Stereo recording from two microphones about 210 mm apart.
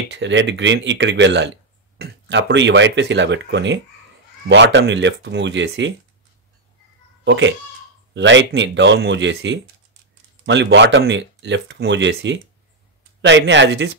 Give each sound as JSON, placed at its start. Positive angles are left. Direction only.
{"t": 0.1, "sound": "speech", "side_deg": -60}
{"t": 7.2, "sound": "speech", "side_deg": -60}